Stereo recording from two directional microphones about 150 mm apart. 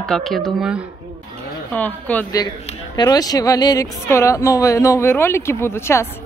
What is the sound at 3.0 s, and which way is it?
Speech, 25° left (ahead or behind).